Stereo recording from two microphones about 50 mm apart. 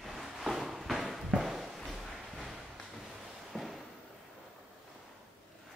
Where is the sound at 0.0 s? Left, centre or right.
Centre.